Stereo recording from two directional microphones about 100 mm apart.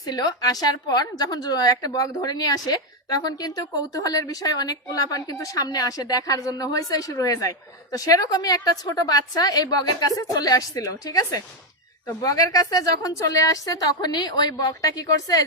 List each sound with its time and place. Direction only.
0.0 s a woman's voice: 40° left (ahead or behind)